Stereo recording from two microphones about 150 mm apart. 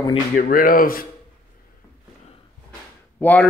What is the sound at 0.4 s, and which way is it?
Speech, 70° left (ahead or behind).